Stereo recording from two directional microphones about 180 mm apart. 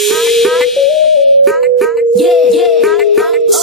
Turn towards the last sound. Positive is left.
turn(degrees=0)  # may be behind; listen again after turning